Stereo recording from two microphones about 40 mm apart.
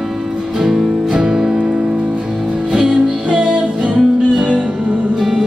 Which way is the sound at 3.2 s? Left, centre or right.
Right.